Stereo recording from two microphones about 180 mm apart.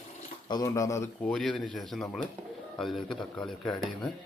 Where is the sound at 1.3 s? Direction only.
Centre (ahead or behind).